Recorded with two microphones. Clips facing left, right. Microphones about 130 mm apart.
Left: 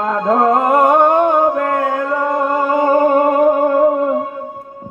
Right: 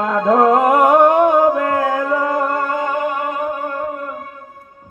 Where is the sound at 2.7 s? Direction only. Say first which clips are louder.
Left 8 dB; 35° left (ahead or behind); by 3.5 s 50° left (ahead or behind).